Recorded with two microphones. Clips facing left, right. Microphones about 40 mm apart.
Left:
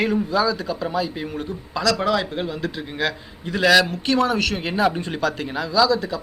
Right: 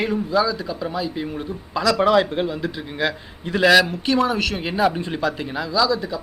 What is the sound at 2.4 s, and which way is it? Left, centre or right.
A man's voice, centre.